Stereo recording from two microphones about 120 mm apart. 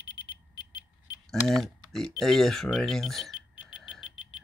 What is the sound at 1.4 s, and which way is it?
Speech, centre (ahead or behind).